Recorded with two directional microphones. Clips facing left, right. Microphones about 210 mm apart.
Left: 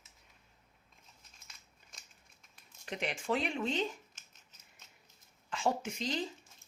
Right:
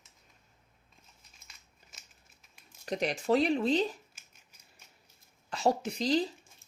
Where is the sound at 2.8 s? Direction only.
40° right (ahead or behind).